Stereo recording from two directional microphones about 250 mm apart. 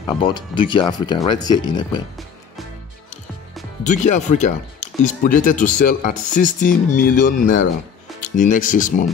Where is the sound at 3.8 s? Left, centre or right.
Left.